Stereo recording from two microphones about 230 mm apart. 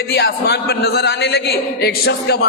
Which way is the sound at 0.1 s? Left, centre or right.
Left.